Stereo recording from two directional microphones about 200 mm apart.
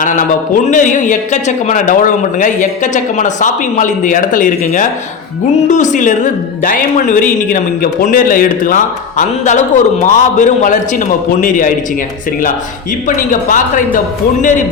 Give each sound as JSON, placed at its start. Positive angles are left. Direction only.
{"t": 0.0, "sound": "a woman's voice", "side_deg": 40}
{"t": 13.1, "sound": "a woman's voice", "side_deg": 40}